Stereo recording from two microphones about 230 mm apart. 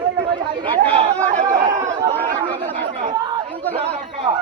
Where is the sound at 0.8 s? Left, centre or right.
Right.